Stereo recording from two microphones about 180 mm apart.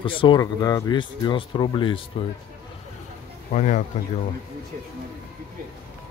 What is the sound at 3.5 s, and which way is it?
Speech, 40° left (ahead or behind).